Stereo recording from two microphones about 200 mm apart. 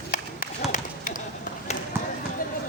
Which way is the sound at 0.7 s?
40° left (ahead or behind).